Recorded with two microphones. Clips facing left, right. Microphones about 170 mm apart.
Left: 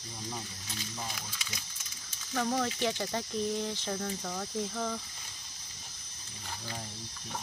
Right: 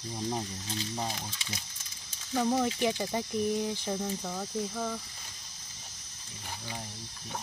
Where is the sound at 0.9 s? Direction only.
30° right (ahead or behind).